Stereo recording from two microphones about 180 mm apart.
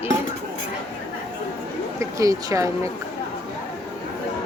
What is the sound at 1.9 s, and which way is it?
Speech, 20° right (ahead or behind).